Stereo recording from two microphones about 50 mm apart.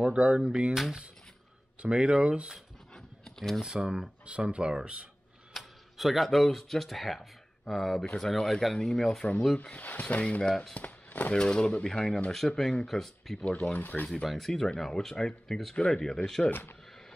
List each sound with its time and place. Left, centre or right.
0.0 s speech: centre
0.7 s speech: centre
1.8 s speech: centre
2.9 s a sound: centre
3.6 s speech: centre
5.5 s speech: centre
9.6 s speech: left
11.3 s speech: centre
13.4 s speech: left
14.2 s speech: centre
15.7 s speech: left